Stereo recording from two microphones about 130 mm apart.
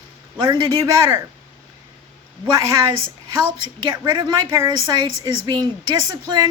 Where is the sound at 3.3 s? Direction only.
35° right (ahead or behind).